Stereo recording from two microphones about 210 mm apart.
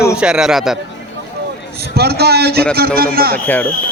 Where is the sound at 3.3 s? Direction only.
10° left (ahead or behind).